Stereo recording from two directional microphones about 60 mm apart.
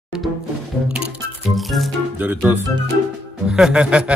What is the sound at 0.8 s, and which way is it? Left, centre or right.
Music, centre.